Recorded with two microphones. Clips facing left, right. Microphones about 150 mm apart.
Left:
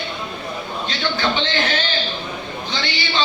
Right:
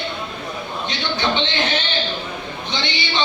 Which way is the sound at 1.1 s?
20° right (ahead or behind).